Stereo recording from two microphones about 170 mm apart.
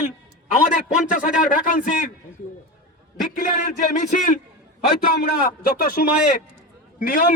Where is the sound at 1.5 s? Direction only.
50° left (ahead or behind).